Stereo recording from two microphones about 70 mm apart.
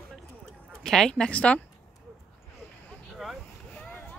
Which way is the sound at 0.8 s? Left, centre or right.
Centre.